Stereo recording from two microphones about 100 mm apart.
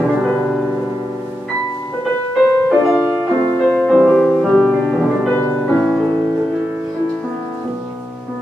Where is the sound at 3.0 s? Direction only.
10° left (ahead or behind).